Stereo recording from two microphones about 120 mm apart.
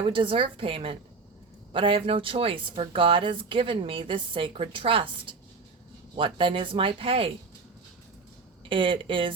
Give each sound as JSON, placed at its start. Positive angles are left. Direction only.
{"t": 0.0, "sound": "speech", "side_deg": -45}
{"t": 8.7, "sound": "speech", "side_deg": -45}